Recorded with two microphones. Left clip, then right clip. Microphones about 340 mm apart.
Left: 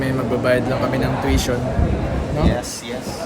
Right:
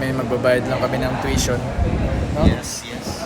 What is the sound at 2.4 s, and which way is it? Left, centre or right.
Speech, left.